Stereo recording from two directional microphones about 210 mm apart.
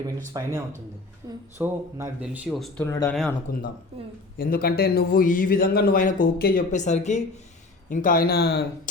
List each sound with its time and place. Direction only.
0.4 s speech: 20° right (ahead or behind)
1.5 s speech: 10° right (ahead or behind)
2.8 s speech: 15° left (ahead or behind)
3.5 s a man's voice: 45° left (ahead or behind)